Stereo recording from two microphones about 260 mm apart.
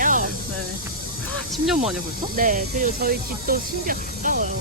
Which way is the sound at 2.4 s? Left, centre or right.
Right.